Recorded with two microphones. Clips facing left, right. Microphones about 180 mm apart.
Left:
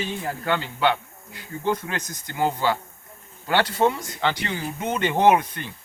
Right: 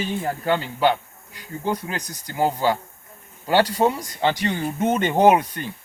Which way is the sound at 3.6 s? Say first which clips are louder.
Right 2 dB; 40° right (ahead or behind).